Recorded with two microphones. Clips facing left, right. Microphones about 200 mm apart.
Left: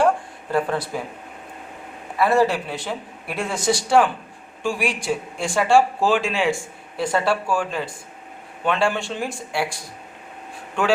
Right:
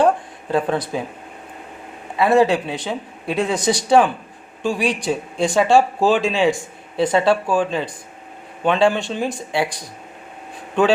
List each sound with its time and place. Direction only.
0.5 s speech: 20° right (ahead or behind)
2.1 s speech: 20° right (ahead or behind)
10.8 s speech: 20° right (ahead or behind)